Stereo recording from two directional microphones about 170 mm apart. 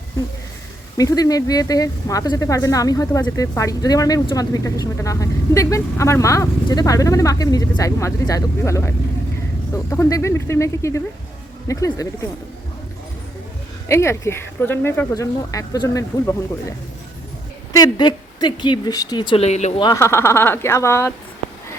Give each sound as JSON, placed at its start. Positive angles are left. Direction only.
{"t": 0.9, "sound": "speech", "side_deg": 20}
{"t": 13.8, "sound": "speech", "side_deg": 15}
{"t": 19.5, "sound": "speech", "side_deg": 40}
{"t": 19.8, "sound": "speech", "side_deg": 20}